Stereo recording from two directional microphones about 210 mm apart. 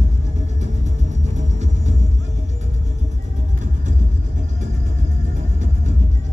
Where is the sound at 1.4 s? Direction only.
35° right (ahead or behind).